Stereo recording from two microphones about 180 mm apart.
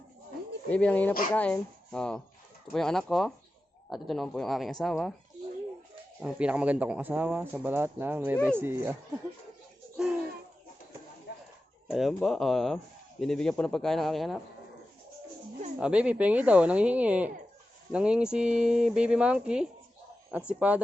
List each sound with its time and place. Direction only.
0.7 s speech: 5° left (ahead or behind)
6.2 s speech: 5° right (ahead or behind)
10.0 s a sound: 5° right (ahead or behind)
11.3 s a sound: 70° left (ahead or behind)
11.9 s speech: centre (ahead or behind)
15.8 s speech: 5° right (ahead or behind)